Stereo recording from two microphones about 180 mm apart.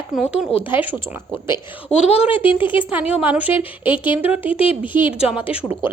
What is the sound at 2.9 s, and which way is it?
Speech, 10° right (ahead or behind).